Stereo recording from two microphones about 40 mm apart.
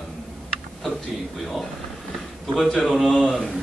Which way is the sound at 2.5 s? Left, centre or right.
Centre.